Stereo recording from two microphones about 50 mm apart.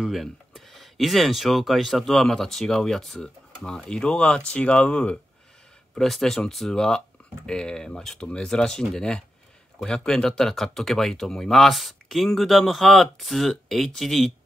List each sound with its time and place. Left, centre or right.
0.2 s speech: centre; by 5.2 s left
5.9 s speech: centre